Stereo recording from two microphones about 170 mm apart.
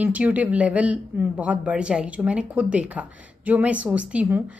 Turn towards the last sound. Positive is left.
turn(degrees=-5)  # may be behind; listen again after turning